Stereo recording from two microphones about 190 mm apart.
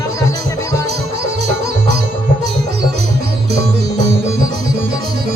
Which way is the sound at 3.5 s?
60° right (ahead or behind).